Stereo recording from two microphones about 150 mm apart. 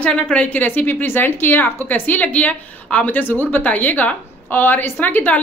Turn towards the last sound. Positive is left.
turn(degrees=10)  # may be behind; listen again after turning